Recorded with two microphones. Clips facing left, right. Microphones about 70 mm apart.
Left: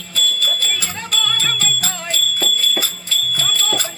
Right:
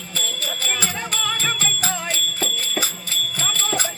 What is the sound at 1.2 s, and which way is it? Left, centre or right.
Music, centre.